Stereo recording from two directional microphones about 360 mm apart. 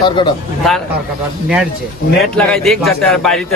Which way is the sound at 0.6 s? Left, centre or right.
Centre.